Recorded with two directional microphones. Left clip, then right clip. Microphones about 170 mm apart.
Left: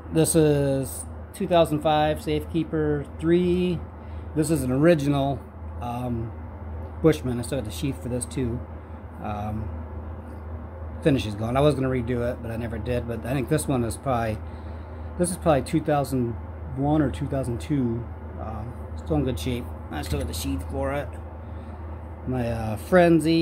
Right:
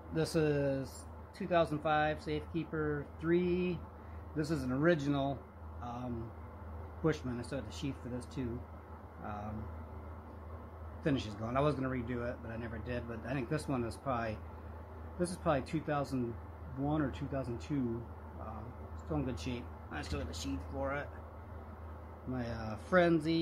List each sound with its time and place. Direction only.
0.1 s speech: 20° left (ahead or behind)
11.0 s speech: 20° left (ahead or behind)
19.0 s speech: 20° left (ahead or behind)
22.3 s speech: 20° left (ahead or behind)